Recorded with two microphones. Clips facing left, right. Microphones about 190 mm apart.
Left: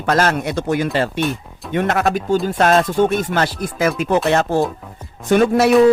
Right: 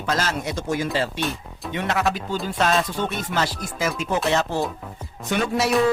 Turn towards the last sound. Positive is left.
turn(degrees=55)  # may be behind; listen again after turning